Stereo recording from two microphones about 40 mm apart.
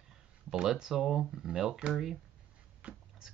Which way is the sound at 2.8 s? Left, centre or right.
Right.